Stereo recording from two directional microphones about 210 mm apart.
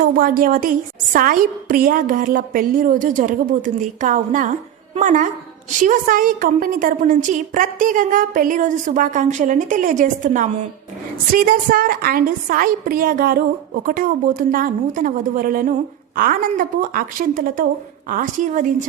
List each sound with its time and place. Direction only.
0.0 s a woman's voice: 45° right (ahead or behind)